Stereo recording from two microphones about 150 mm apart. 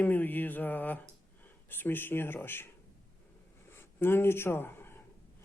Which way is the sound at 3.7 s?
15° left (ahead or behind).